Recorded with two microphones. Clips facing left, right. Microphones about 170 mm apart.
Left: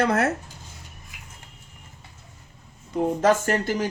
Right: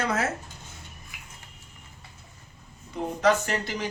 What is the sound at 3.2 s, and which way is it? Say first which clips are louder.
Speech: left 1 dB; 50° left (ahead or behind).